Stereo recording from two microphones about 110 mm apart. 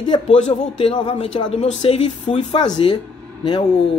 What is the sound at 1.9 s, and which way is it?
Speech, 90° left.